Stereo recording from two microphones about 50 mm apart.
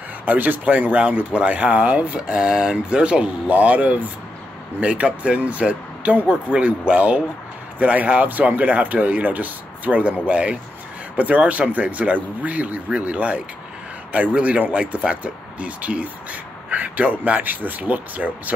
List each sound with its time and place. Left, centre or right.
0.2 s speech: right